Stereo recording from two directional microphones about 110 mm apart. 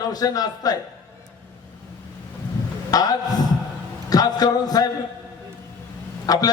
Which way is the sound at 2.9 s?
35° left (ahead or behind).